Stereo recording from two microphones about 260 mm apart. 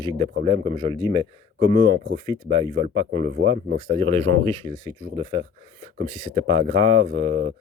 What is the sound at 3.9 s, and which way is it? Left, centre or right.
Speech, right.